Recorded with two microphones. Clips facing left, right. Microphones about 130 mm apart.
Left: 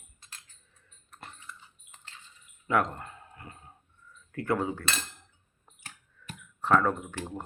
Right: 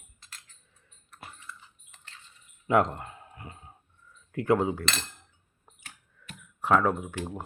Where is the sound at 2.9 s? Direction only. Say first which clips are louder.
Right 2 dB; 20° right (ahead or behind).